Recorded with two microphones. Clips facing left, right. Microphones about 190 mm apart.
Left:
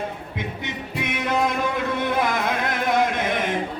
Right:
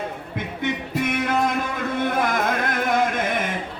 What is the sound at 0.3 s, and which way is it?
Music, 50° right (ahead or behind).